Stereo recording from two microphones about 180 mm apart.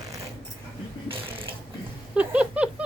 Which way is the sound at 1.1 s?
30° right (ahead or behind).